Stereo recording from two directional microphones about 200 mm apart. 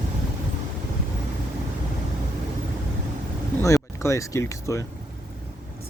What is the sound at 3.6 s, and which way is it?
Speech, 15° left (ahead or behind).